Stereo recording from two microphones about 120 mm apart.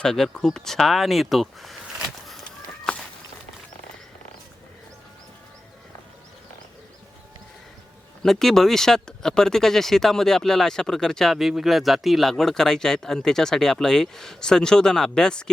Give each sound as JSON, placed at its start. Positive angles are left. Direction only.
{"t": 0.0, "sound": "speech", "side_deg": 5}
{"t": 2.9, "sound": "walk", "side_deg": 5}
{"t": 8.2, "sound": "speech", "side_deg": 5}